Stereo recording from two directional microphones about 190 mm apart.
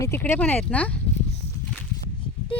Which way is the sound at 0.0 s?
10° left (ahead or behind).